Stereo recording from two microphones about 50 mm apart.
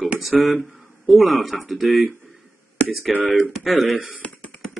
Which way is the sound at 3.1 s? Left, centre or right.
Centre.